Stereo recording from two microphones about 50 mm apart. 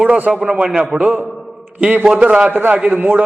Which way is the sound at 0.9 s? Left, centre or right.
Right.